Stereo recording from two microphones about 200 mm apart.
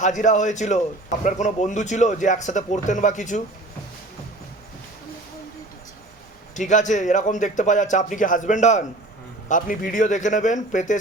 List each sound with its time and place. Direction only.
0.0 s a man's voice: 40° left (ahead or behind)
6.5 s a man's voice: 40° left (ahead or behind)